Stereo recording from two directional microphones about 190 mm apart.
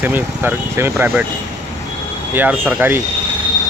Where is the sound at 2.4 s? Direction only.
10° right (ahead or behind).